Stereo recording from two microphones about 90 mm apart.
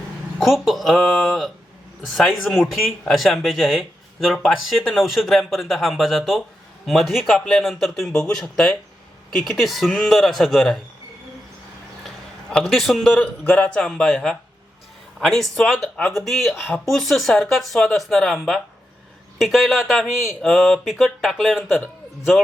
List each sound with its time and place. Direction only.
0.3 s speech: centre (ahead or behind)
12.5 s a man's voice: 5° left (ahead or behind)